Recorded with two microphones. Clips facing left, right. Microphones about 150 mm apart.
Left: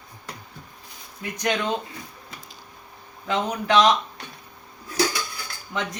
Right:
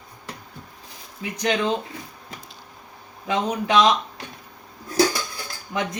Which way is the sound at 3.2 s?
15° right (ahead or behind).